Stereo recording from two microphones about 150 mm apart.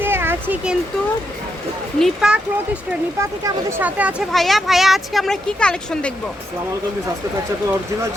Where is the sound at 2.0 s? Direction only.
Centre (ahead or behind).